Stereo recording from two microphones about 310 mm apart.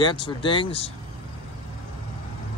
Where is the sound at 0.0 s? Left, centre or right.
Centre.